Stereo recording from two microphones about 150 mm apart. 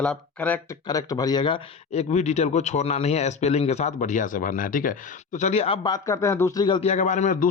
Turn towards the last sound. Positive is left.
turn(degrees=55)  # may be behind; listen again after turning